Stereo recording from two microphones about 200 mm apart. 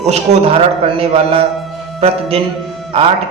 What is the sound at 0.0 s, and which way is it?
A woman's voice, 30° right (ahead or behind).